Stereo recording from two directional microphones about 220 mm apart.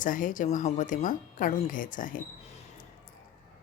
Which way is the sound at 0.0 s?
40° left (ahead or behind).